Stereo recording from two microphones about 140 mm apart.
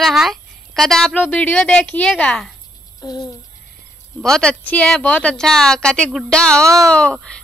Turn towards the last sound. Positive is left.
turn(degrees=5)  # may be behind; listen again after turning